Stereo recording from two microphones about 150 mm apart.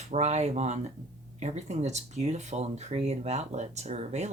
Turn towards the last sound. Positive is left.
turn(degrees=-45)  # may be behind; listen again after turning